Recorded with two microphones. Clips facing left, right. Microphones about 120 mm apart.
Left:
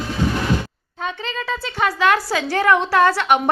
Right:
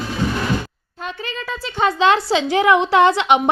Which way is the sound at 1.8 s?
25° right (ahead or behind).